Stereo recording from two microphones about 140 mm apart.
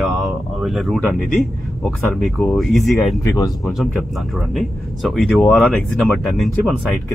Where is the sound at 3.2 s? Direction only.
25° left (ahead or behind).